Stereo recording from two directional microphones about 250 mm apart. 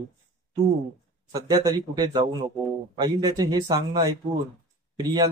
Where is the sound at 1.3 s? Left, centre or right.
Centre.